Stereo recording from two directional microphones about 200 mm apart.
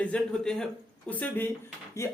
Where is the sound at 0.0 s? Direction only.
5° left (ahead or behind).